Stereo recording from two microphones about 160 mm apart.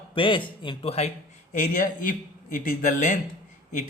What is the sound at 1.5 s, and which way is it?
A man's voice, 55° left (ahead or behind).